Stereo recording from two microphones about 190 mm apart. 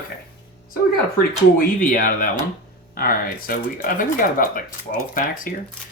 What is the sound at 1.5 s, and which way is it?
Speech, 45° left (ahead or behind).